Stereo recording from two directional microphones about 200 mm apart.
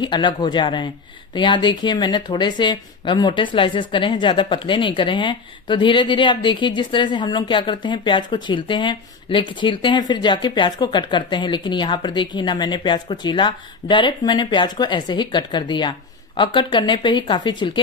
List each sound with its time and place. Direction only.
0.0 s speech: 25° left (ahead or behind)